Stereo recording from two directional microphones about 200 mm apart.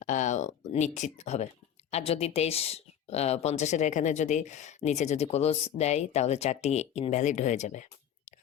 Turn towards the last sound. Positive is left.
turn(degrees=35)  # may be behind; listen again after turning